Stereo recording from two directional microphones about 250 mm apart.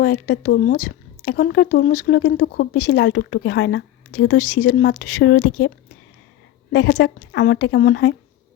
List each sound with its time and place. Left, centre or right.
0.0 s a woman's voice: left
6.7 s a woman's voice: left